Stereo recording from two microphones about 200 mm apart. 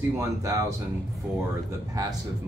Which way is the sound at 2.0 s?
20° right (ahead or behind).